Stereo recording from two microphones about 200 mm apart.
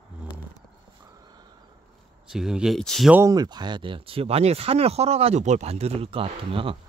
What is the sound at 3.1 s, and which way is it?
Speech, 15° right (ahead or behind).